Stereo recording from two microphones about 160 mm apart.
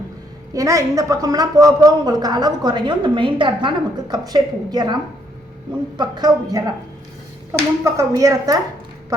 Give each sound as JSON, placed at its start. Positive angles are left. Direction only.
{"t": 0.5, "sound": "a woman's voice", "side_deg": -20}
{"t": 6.0, "sound": "a woman's voice", "side_deg": -25}
{"t": 7.9, "sound": "a woman's voice", "side_deg": -20}